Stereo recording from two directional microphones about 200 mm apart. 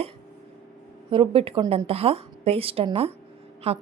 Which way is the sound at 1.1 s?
25° right (ahead or behind).